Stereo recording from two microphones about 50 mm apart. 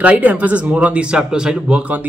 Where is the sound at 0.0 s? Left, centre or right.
Right.